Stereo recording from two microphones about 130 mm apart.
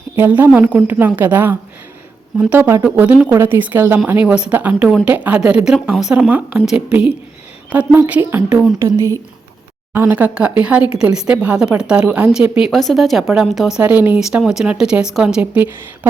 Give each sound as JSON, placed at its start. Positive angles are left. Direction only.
{"t": 0.2, "sound": "a woman's voice", "side_deg": -15}